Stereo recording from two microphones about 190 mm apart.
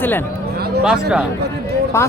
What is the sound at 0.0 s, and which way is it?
Speech, 10° left (ahead or behind).